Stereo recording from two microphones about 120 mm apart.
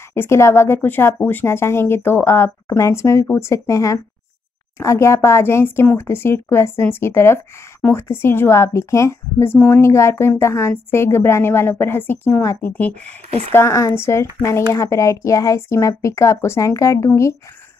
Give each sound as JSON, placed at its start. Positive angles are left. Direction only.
{"t": 0.1, "sound": "a woman's voice", "side_deg": 20}
{"t": 13.0, "sound": "speech", "side_deg": -60}
{"t": 13.5, "sound": "a woman's voice", "side_deg": 20}